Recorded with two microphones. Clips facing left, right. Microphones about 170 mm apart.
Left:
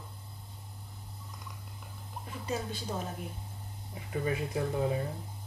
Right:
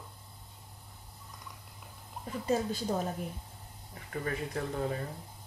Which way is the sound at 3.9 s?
15° left (ahead or behind).